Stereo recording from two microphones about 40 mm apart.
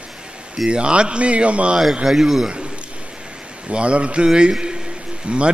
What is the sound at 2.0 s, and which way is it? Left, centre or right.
Speech, centre.